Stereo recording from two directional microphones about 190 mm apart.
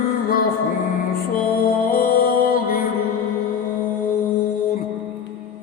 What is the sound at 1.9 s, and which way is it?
Music, 50° left (ahead or behind).